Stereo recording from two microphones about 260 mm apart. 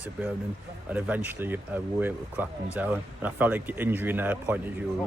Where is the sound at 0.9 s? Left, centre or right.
Centre.